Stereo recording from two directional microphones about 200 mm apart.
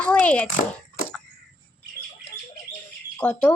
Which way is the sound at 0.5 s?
45° left (ahead or behind).